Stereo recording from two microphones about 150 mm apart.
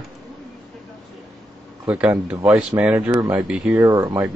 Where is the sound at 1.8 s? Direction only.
10° right (ahead or behind).